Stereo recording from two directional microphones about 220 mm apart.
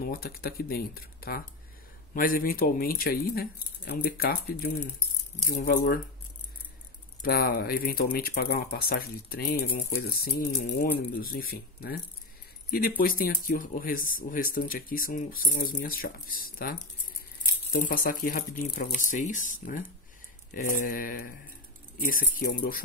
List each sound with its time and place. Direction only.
0.0 s speech: 40° left (ahead or behind)
7.2 s speech: 40° left (ahead or behind)
13.0 s speech: 40° left (ahead or behind)